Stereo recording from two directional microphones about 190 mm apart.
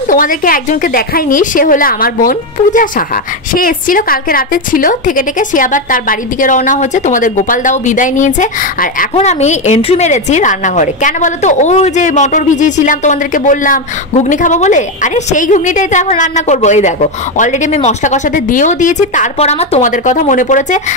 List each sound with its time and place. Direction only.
0.1 s a woman's voice: 45° left (ahead or behind)